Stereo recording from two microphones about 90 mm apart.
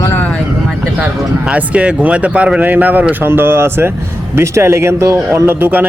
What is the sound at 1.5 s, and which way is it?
Speech, 15° right (ahead or behind).